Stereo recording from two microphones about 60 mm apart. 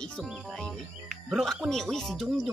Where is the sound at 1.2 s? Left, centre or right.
Centre.